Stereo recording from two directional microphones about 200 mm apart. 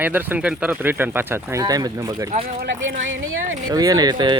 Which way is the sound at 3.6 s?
20° right (ahead or behind).